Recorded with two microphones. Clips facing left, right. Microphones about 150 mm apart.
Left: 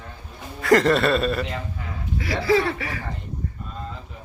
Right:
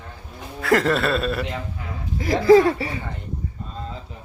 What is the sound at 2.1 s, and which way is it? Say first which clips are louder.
Speech: right 7 dB; 45° right (ahead or behind).